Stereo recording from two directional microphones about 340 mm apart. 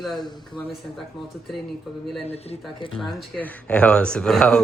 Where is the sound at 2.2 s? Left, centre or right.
Centre.